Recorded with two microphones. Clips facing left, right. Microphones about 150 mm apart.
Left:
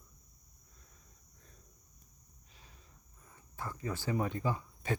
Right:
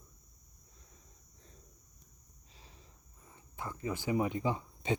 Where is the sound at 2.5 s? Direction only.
25° right (ahead or behind).